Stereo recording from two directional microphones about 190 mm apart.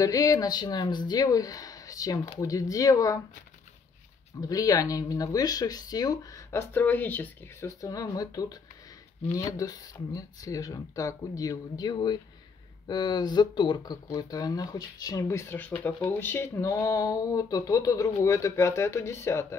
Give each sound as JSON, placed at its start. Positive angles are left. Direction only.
{"t": 0.0, "sound": "speech", "side_deg": 15}
{"t": 4.4, "sound": "speech", "side_deg": 20}